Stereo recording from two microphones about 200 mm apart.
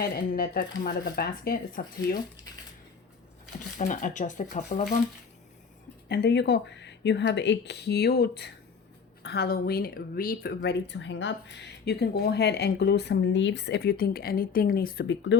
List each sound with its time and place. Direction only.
0.0 s speech: 45° left (ahead or behind)
3.8 s speech: 40° left (ahead or behind)
6.1 s speech: 55° left (ahead or behind)